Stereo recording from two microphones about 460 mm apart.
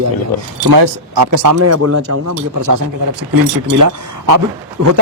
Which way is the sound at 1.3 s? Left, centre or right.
Right.